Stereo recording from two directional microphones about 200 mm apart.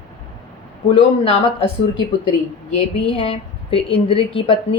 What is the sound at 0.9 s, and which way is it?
Speech, 30° left (ahead or behind).